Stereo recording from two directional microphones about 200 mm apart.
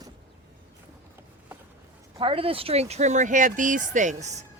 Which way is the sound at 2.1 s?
25° right (ahead or behind).